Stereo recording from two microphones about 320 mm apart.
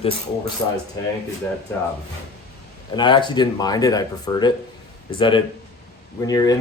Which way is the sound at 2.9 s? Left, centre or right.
Centre.